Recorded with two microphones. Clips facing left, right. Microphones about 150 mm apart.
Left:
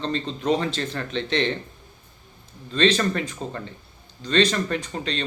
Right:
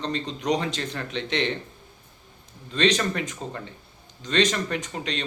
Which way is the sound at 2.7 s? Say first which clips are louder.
Left 2 dB; 15° right (ahead or behind).